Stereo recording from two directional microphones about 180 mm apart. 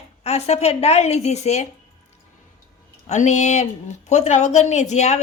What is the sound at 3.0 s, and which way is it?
A woman's voice, 40° left (ahead or behind).